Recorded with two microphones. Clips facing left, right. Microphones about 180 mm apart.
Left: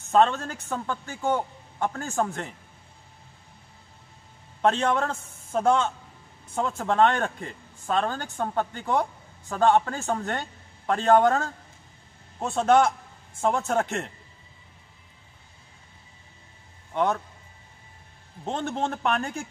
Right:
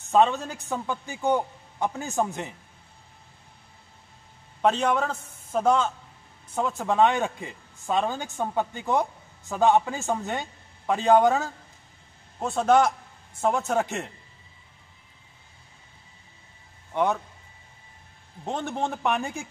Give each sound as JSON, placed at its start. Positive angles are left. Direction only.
{"t": 0.2, "sound": "a woman's voice", "side_deg": -15}
{"t": 4.6, "sound": "a man's voice", "side_deg": -5}
{"t": 18.5, "sound": "a woman's voice", "side_deg": -10}